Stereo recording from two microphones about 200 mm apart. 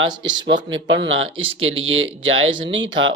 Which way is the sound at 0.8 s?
65° right (ahead or behind).